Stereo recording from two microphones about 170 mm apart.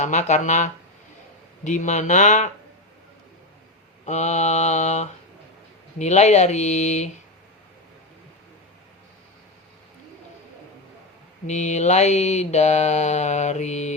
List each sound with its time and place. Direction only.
0.0 s speech: 45° left (ahead or behind)
4.0 s speech: 45° left (ahead or behind)
11.4 s mantra: 45° left (ahead or behind)